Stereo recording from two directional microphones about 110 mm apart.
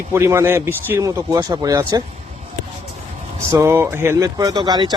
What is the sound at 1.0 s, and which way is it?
Speech, 30° right (ahead or behind).